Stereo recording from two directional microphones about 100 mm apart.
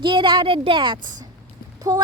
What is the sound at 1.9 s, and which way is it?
Speech, 40° right (ahead or behind).